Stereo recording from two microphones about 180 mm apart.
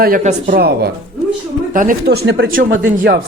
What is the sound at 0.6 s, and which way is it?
Speech, 65° right (ahead or behind).